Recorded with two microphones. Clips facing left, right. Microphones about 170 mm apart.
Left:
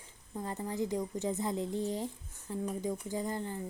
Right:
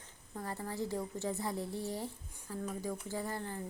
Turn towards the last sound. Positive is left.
turn(degrees=15)  # may be behind; listen again after turning